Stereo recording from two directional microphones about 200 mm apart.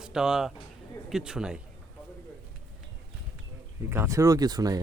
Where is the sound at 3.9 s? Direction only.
15° right (ahead or behind).